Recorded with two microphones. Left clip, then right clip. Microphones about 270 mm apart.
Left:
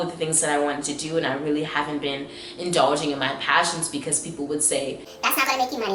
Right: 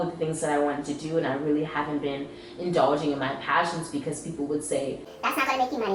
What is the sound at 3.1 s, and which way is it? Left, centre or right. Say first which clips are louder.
Speech: left 4 dB; centre.